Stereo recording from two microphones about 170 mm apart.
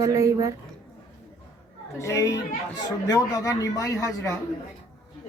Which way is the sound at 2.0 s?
20° left (ahead or behind).